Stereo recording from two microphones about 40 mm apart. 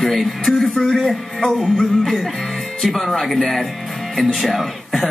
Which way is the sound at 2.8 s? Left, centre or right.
Centre.